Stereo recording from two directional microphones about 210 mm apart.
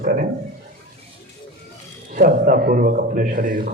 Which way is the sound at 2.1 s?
45° right (ahead or behind).